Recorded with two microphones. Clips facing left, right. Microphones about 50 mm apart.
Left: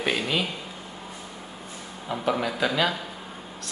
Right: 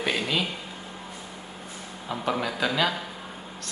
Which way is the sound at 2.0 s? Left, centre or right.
Centre.